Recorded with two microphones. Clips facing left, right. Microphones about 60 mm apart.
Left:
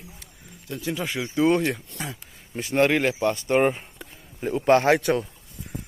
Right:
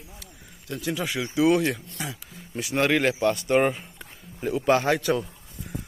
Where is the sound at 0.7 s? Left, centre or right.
Left.